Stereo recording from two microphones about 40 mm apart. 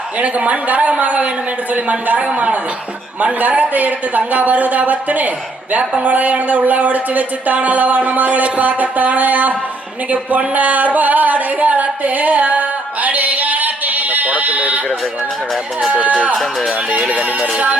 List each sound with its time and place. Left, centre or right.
0.2 s speech: right
10.1 s a sound: right
15.9 s speech: right
16.3 s speech: centre